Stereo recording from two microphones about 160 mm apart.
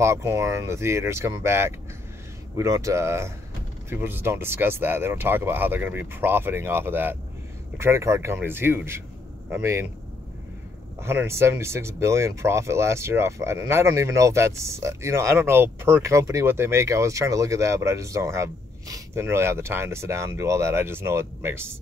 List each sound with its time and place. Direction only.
0.0 s speech: 15° right (ahead or behind)
11.0 s speech: 15° right (ahead or behind)